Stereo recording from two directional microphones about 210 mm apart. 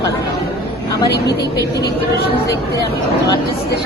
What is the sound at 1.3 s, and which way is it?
Speech, 50° left (ahead or behind).